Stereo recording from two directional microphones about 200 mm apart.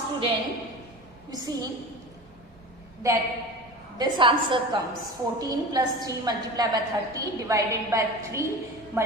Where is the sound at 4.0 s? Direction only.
25° right (ahead or behind).